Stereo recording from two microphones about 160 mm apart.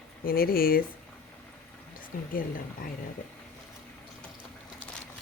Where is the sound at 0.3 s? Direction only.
65° left (ahead or behind).